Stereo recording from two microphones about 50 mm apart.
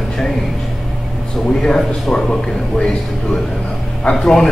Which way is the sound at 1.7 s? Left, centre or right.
Centre.